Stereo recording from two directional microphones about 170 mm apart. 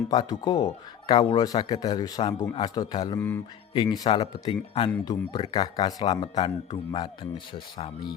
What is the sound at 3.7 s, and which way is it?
A man's voice, 25° left (ahead or behind).